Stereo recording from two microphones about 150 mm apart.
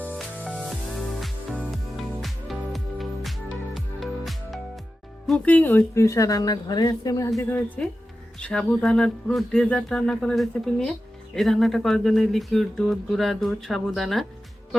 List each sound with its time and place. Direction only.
0.2 s music: centre (ahead or behind)
5.2 s a woman's voice: 5° left (ahead or behind); by 7.6 s 20° left (ahead or behind)
8.4 s speech: 5° left (ahead or behind)